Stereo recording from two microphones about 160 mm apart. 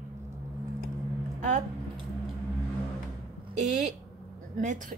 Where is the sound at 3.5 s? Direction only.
50° right (ahead or behind).